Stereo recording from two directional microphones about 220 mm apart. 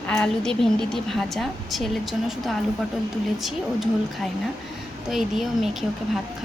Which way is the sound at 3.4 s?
Centre (ahead or behind).